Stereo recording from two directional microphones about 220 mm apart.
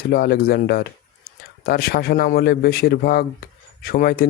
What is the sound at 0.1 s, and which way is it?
Speech, 45° left (ahead or behind).